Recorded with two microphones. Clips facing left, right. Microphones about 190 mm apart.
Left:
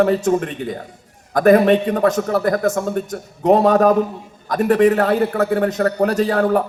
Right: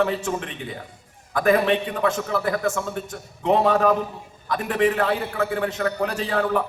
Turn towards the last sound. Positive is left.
turn(degrees=45)  # may be behind; listen again after turning